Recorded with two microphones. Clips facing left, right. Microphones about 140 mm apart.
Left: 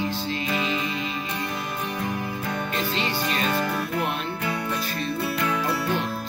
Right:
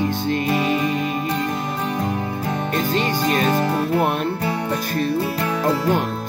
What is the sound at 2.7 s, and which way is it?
Music, 45° right (ahead or behind).